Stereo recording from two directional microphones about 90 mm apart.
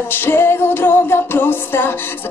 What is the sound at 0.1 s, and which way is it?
Music, 25° left (ahead or behind).